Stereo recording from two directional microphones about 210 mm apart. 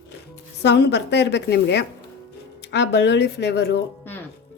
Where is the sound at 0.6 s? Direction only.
55° left (ahead or behind).